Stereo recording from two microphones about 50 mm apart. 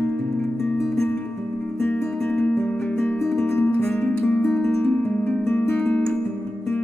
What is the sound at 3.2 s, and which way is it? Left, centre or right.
Music, centre.